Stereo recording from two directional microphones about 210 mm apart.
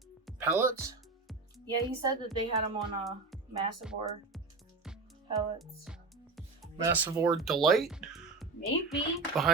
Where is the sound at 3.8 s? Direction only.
5° right (ahead or behind).